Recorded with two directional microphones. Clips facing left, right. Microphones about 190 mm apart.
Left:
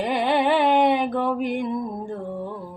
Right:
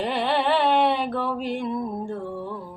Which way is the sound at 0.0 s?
15° left (ahead or behind).